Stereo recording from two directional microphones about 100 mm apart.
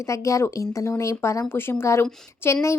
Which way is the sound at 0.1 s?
30° left (ahead or behind).